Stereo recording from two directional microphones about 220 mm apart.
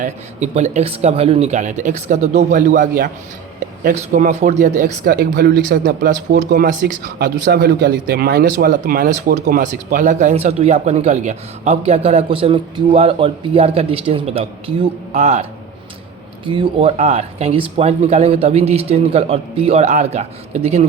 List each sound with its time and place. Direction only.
0.0 s speech: 30° right (ahead or behind)
16.5 s speech: 25° right (ahead or behind)